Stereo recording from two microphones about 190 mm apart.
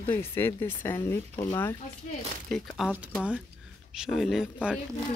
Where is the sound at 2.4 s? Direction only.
Centre (ahead or behind).